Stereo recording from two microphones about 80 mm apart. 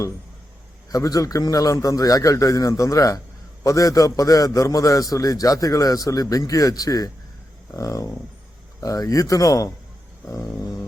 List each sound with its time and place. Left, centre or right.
0.9 s a man's voice: left